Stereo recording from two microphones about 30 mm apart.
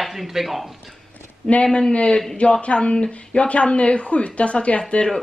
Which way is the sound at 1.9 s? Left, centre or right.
Left.